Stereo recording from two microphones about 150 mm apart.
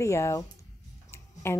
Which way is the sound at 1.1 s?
15° left (ahead or behind).